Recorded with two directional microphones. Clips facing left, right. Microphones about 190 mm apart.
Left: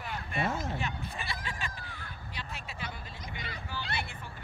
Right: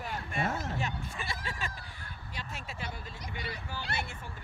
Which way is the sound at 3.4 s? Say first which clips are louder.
Right 1 dB; 45° right (ahead or behind).